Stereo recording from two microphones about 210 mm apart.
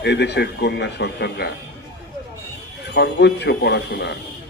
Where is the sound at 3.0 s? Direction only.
55° left (ahead or behind).